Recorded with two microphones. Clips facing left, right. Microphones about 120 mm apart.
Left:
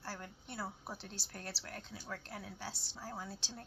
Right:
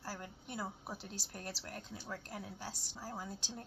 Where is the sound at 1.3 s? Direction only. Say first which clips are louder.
Even; 10° right (ahead or behind).